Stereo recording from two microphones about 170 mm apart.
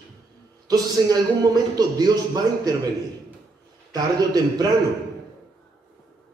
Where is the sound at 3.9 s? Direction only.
20° right (ahead or behind).